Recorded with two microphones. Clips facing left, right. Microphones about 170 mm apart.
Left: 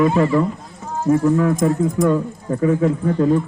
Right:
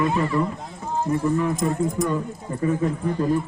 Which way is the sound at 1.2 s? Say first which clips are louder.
Left 6 dB; 90° left.